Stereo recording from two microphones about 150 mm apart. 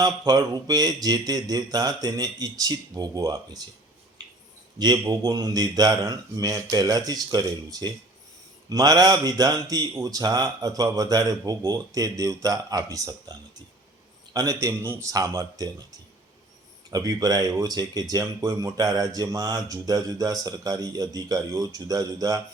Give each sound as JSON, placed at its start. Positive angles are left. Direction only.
{"t": 0.0, "sound": "a man's voice", "side_deg": -25}
{"t": 4.8, "sound": "a man's voice", "side_deg": -25}
{"t": 14.3, "sound": "a man's voice", "side_deg": -20}
{"t": 16.9, "sound": "a man's voice", "side_deg": -25}